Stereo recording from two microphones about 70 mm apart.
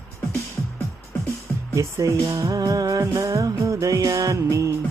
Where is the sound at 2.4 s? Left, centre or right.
Right.